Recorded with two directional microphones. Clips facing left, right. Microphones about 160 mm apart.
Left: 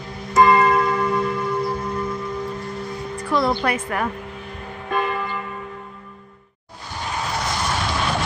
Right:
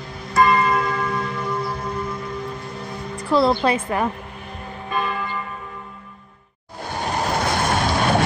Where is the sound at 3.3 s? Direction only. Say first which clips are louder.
Right 3 dB; 30° right (ahead or behind).